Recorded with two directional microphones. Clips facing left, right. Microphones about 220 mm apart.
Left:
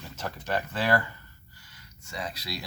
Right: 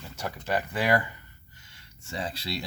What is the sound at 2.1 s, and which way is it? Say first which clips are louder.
Speech: right 3 dB; 30° right (ahead or behind).